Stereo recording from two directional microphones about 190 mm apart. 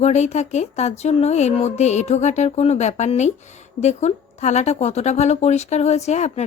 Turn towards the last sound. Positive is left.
turn(degrees=35)  # may be behind; listen again after turning